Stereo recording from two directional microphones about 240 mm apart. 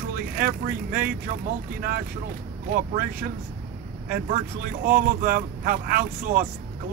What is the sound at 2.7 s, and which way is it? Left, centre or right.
Speech, right.